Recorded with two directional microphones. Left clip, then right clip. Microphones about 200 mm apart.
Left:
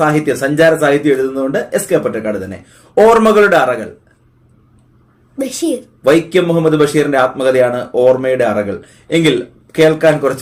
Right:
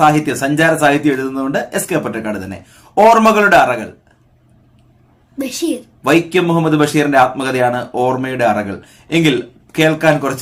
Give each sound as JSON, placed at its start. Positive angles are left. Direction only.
{"t": 0.0, "sound": "speech", "side_deg": -20}
{"t": 5.4, "sound": "a child's voice", "side_deg": -15}